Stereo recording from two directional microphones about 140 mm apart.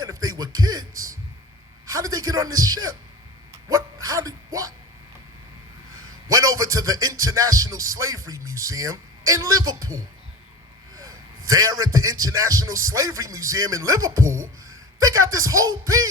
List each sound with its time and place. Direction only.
0.0 s speech: 25° right (ahead or behind)
1.9 s rapping: 25° right (ahead or behind)
3.7 s a sound: 25° right (ahead or behind)
6.3 s rapping: 25° right (ahead or behind)